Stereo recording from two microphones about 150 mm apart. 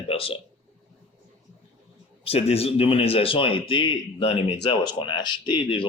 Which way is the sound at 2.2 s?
40° left (ahead or behind).